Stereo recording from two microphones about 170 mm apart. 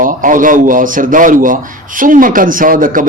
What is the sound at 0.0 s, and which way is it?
A man's voice, 50° right (ahead or behind).